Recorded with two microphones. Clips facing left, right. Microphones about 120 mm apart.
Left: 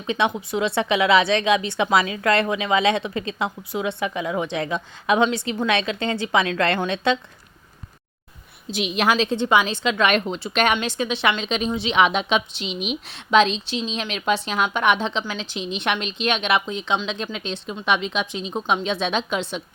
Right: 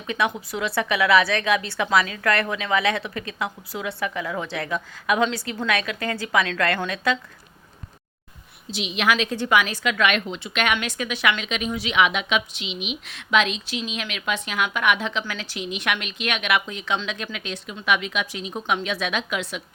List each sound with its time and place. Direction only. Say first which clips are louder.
0.1 s a woman's voice: left 3 dB; 20° left (ahead or behind)
8.7 s a woman's voice: left 4 dB; 50° left (ahead or behind)
9.0 s a woman's voice: left 1 dB; 30° left (ahead or behind)
13.1 s a woman's voice: left 4 dB; 30° left (ahead or behind)